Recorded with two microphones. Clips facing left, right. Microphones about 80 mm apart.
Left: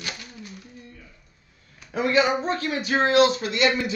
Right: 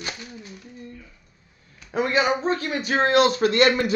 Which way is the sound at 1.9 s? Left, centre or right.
Right.